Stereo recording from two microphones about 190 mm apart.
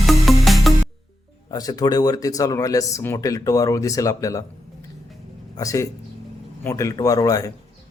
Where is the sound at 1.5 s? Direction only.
20° left (ahead or behind).